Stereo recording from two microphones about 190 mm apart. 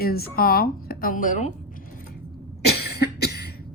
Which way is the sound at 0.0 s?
55° left (ahead or behind).